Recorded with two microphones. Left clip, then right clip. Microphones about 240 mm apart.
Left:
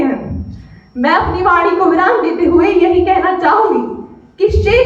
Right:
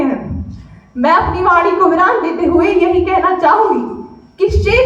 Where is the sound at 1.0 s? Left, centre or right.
Centre.